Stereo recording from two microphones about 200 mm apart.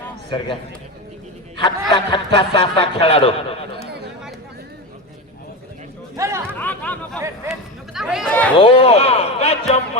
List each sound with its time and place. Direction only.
0.3 s a man's voice: 25° left (ahead or behind)
1.9 s speech: 25° left (ahead or behind)
3.8 s chatter: 55° right (ahead or behind)
6.1 s chatter: 15° right (ahead or behind)
6.6 s chatter: 10° left (ahead or behind)
7.9 s speech: centre (ahead or behind)
8.5 s speech: 25° left (ahead or behind)